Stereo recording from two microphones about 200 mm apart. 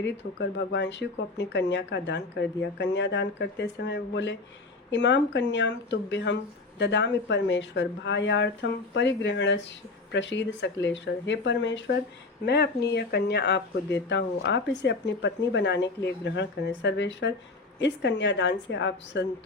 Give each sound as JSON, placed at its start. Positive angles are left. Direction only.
{"t": 0.0, "sound": "speech", "side_deg": 60}